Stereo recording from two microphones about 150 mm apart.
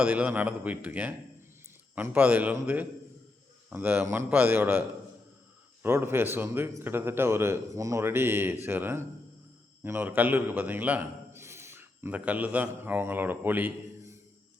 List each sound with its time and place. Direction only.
0.0 s a man's voice: 10° right (ahead or behind)
5.8 s a man's voice: 15° right (ahead or behind)